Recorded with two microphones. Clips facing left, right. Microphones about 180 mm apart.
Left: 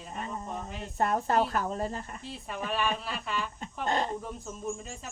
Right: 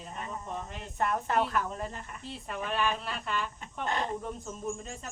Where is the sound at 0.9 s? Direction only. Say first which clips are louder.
Left 2 dB; 35° left (ahead or behind).